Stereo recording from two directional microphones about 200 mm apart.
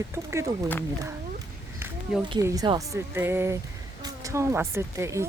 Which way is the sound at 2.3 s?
15° right (ahead or behind).